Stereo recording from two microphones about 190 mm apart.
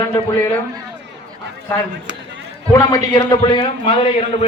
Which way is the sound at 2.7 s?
20° left (ahead or behind).